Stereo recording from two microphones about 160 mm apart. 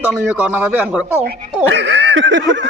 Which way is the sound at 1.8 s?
90° right.